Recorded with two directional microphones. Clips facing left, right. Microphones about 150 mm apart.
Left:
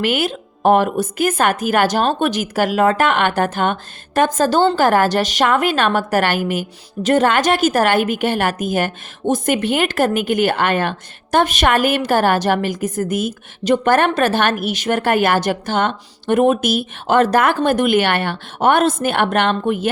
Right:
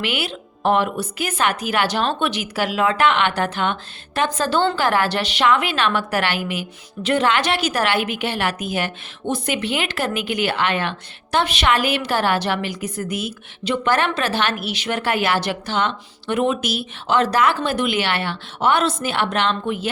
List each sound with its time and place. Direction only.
0.0 s a woman's voice: 45° left (ahead or behind)